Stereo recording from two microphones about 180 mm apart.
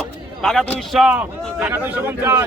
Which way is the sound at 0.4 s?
Centre (ahead or behind).